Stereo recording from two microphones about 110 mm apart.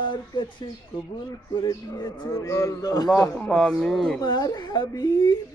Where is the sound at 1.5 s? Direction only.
35° left (ahead or behind).